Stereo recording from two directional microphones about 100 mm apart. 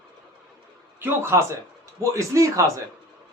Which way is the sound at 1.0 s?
25° right (ahead or behind).